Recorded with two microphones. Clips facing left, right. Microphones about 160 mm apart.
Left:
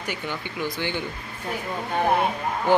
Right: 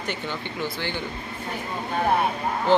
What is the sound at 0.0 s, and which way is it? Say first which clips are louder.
Speech: even; 10° left (ahead or behind).